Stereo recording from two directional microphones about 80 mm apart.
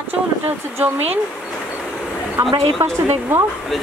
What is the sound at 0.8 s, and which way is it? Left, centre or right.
Speech, right.